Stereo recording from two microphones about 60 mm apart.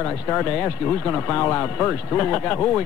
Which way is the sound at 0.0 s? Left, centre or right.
Left.